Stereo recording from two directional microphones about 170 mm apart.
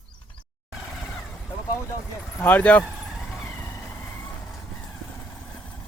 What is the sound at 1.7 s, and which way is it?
Speech, 15° left (ahead or behind).